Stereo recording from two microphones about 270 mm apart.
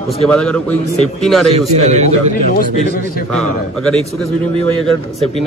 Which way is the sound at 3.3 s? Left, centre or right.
Centre.